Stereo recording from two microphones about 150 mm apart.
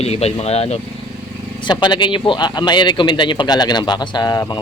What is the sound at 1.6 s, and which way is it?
Speech, 30° left (ahead or behind).